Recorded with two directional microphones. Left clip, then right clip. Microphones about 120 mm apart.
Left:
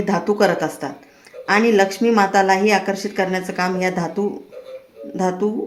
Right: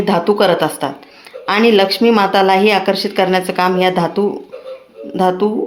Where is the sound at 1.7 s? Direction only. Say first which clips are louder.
Right 4 dB; 15° right (ahead or behind).